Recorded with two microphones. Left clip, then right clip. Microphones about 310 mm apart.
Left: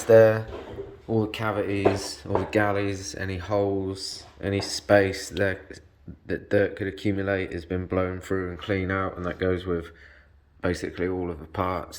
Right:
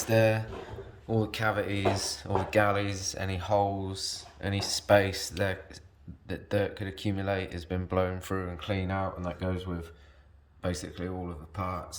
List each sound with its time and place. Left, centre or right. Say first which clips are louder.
1.0 s speech: left 3 dB; centre
3.9 s speech: left 1 dB; right
4.4 s speech: left 5 dB; centre
8.6 s speech: left 5 dB; right
10.6 s speech: left 8 dB; centre